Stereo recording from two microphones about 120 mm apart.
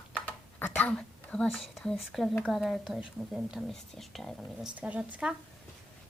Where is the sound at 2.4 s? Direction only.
5° right (ahead or behind).